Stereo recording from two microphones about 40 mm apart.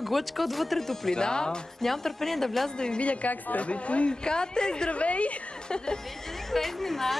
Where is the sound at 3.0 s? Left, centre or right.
Left.